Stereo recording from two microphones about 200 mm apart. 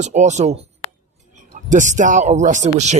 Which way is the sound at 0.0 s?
35° right (ahead or behind).